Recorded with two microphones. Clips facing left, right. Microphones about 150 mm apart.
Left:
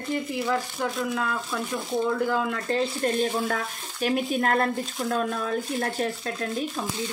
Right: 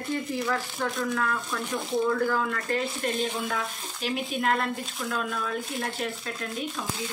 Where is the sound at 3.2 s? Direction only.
45° left (ahead or behind).